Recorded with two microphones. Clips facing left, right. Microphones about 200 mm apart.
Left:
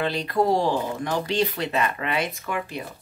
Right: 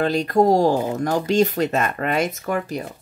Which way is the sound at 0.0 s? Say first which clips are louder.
Right 6 dB; 45° right (ahead or behind).